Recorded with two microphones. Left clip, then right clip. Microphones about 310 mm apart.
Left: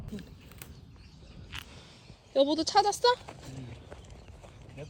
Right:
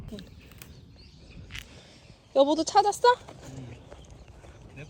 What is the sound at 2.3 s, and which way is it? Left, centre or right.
Speech, centre.